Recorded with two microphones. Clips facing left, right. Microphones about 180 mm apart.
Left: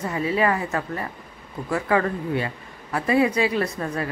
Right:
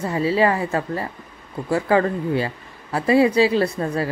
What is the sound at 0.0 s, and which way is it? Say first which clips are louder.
A woman's voice: right 4 dB; 30° right (ahead or behind).